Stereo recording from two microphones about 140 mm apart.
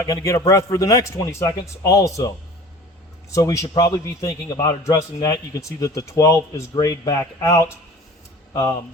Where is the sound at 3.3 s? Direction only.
20° left (ahead or behind).